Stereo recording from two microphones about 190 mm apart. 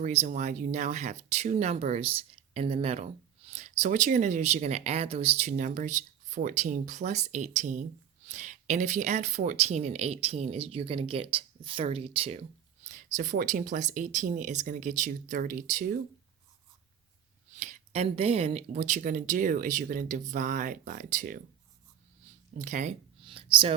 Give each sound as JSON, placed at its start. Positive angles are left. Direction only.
{"t": 0.0, "sound": "speech", "side_deg": -35}
{"t": 12.8, "sound": "a sound", "side_deg": -40}
{"t": 13.1, "sound": "speech", "side_deg": -45}
{"t": 17.5, "sound": "speech", "side_deg": -40}
{"t": 22.5, "sound": "speech", "side_deg": -40}